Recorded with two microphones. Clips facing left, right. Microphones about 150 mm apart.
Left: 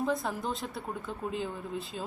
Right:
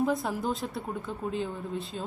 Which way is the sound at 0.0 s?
Centre (ahead or behind).